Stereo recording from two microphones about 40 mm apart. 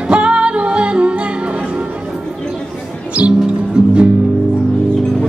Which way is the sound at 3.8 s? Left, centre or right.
Right.